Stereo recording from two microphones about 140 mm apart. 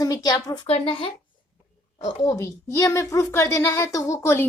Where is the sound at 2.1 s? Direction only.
25° left (ahead or behind).